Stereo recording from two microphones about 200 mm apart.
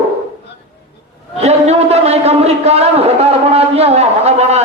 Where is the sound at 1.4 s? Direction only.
30° right (ahead or behind).